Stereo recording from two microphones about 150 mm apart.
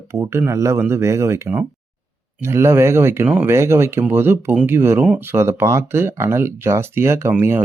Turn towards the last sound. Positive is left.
turn(degrees=-15)  # may be behind; listen again after turning